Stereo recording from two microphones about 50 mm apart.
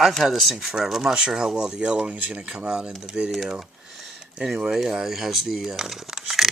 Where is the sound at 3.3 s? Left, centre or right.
Centre.